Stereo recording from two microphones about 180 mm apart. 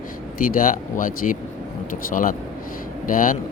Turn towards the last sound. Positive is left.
turn(degrees=50)  # may be behind; listen again after turning